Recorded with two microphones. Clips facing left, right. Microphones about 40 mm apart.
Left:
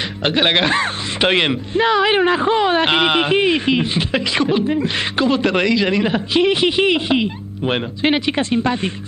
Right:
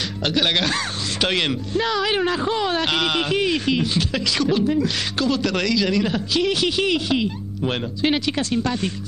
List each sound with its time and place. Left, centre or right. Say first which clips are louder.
0.2 s speech: left 5 dB; left